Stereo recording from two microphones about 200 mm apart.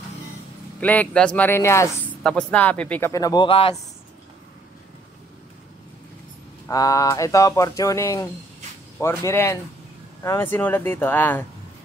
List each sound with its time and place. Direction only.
0.7 s speech: 10° left (ahead or behind); by 3.7 s 25° left (ahead or behind)
6.7 s speech: 15° left (ahead or behind)